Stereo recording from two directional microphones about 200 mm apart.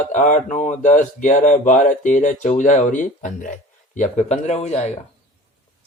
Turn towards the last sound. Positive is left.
turn(degrees=30)  # may be behind; listen again after turning